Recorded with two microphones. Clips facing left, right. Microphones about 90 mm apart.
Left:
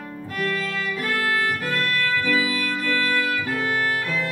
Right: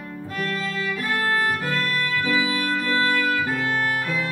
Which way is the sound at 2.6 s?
30° right (ahead or behind).